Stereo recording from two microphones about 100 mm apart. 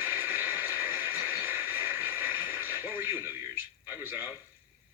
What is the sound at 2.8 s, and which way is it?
A man's voice, 20° right (ahead or behind).